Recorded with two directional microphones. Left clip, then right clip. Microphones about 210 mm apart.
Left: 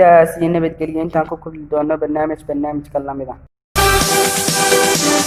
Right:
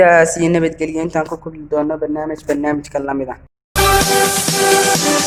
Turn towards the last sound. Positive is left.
turn(degrees=0)  # may be behind; listen again after turning